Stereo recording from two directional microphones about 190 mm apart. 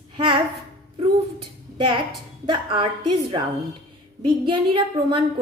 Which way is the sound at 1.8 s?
25° right (ahead or behind).